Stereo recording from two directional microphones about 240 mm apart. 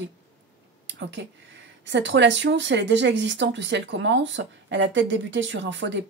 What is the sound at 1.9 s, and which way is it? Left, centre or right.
Speech, right.